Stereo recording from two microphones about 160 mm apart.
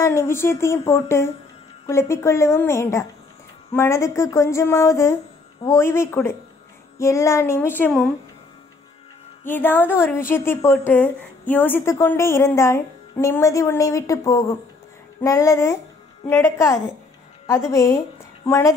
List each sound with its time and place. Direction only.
0.0 s a woman's voice: 15° left (ahead or behind)
9.5 s a woman's voice: 10° left (ahead or behind)